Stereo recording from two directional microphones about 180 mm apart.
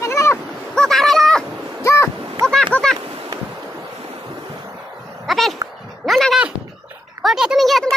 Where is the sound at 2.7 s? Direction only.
5° left (ahead or behind).